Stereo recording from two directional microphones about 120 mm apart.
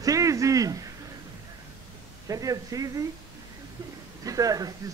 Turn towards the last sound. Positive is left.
turn(degrees=-30)  # may be behind; listen again after turning